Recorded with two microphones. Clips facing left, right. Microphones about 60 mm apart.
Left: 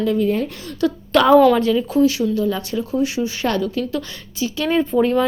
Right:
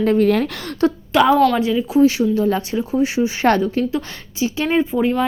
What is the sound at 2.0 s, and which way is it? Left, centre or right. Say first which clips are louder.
A woman's voice: right 2 dB; right.